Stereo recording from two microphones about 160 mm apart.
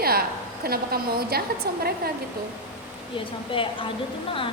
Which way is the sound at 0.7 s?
70° right (ahead or behind).